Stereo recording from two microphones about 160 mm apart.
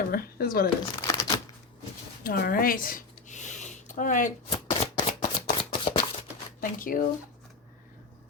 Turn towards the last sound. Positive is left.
turn(degrees=60)  # may be behind; listen again after turning